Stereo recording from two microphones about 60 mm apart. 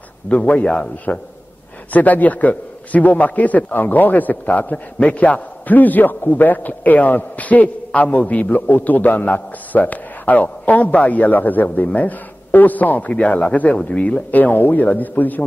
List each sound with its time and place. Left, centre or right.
0.3 s a man's voice: left
1.9 s a man's voice: left
14.3 s a man's voice: left